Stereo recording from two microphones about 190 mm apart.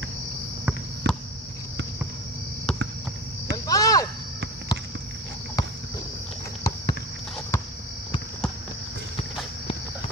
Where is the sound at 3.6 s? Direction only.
20° left (ahead or behind).